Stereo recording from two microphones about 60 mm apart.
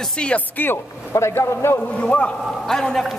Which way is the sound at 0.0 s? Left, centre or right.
Centre.